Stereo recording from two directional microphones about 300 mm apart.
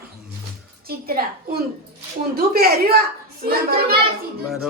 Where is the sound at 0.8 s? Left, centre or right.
Right.